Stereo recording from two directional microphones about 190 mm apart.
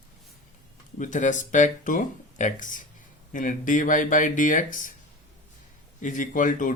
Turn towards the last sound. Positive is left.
turn(degrees=45)  # may be behind; listen again after turning